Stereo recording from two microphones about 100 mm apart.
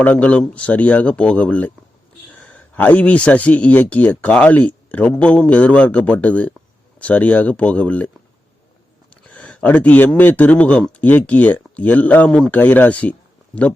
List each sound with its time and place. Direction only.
0.0 s a man's voice: 15° left (ahead or behind)
9.2 s a man's voice: 15° left (ahead or behind)